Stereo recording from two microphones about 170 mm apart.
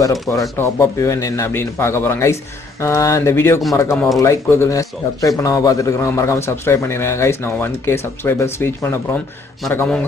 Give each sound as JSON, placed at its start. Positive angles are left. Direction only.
{"t": 0.0, "sound": "a man's voice", "side_deg": 20}